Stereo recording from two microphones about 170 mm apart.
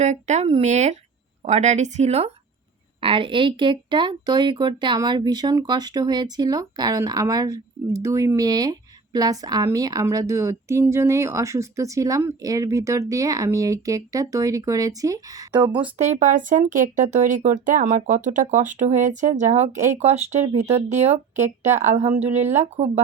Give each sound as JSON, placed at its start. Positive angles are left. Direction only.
{"t": 0.0, "sound": "a woman's voice", "side_deg": -45}
{"t": 16.0, "sound": "speech", "side_deg": -40}
{"t": 22.3, "sound": "speech", "side_deg": -10}